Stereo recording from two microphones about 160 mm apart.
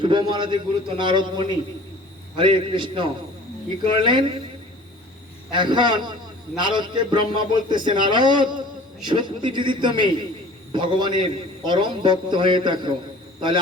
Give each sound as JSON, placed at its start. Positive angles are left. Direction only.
{"t": 0.0, "sound": "a man's voice", "side_deg": -30}
{"t": 5.5, "sound": "a man's voice", "side_deg": -30}